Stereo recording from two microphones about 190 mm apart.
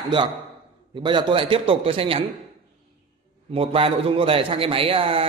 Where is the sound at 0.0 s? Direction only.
25° right (ahead or behind).